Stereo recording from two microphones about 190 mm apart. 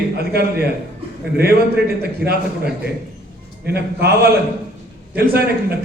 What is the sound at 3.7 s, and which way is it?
A man's voice, 55° right (ahead or behind).